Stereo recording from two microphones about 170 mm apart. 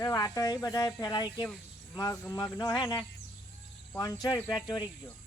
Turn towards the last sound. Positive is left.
turn(degrees=25)  # may be behind; listen again after turning